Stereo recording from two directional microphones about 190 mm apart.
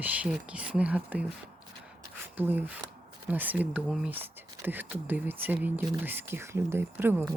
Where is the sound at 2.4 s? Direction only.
10° right (ahead or behind).